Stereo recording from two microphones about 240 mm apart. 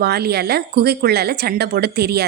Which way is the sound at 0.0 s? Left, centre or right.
Right.